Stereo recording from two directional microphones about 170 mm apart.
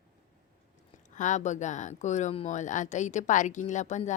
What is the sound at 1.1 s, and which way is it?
Speech, 45° left (ahead or behind).